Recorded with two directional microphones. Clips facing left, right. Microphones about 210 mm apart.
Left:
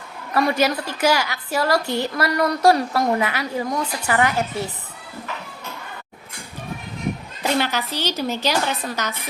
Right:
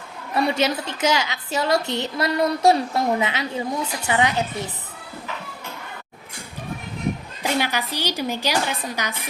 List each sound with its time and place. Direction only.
0.3 s a woman's voice: 25° right (ahead or behind)
7.4 s a woman's voice: 10° right (ahead or behind)